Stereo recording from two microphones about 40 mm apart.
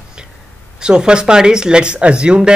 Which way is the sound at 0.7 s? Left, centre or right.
Centre.